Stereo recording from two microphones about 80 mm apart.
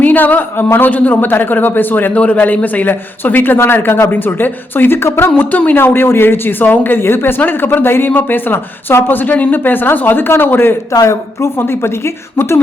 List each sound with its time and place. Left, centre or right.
0.0 s speech: left
5.4 s speech: centre
11.0 s a woman's voice: left